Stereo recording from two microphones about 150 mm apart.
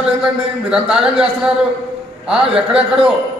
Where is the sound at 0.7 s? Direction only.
5° right (ahead or behind).